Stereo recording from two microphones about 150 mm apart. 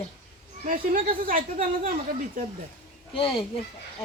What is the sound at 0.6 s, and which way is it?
Speech, 65° right (ahead or behind).